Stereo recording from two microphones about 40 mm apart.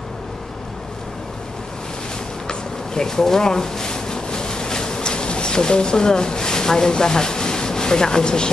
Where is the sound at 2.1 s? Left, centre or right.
Centre.